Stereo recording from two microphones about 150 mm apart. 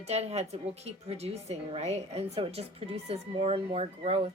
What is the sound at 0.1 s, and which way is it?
A woman's voice, 45° right (ahead or behind).